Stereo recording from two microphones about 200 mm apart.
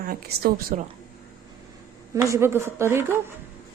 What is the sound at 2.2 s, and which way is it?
A woman's voice, 15° right (ahead or behind).